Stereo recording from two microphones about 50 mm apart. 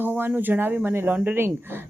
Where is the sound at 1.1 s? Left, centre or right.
Right.